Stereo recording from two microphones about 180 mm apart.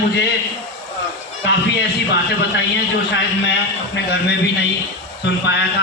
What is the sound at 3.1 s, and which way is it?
A man's voice, 75° left (ahead or behind).